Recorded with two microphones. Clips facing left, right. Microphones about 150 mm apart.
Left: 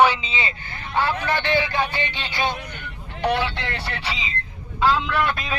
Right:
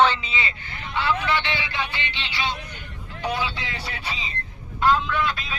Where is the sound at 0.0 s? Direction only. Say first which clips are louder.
Left 2 dB; 10° left (ahead or behind).